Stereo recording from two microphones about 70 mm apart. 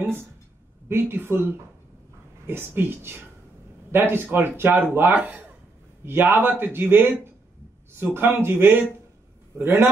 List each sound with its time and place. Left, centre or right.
0.0 s a woman's voice: right